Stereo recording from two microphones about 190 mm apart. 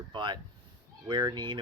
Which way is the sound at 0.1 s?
25° right (ahead or behind).